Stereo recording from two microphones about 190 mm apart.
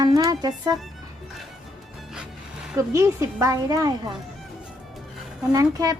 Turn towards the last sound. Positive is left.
turn(degrees=-20)  # may be behind; listen again after turning